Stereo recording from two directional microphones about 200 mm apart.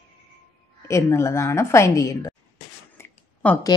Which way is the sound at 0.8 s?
15° left (ahead or behind).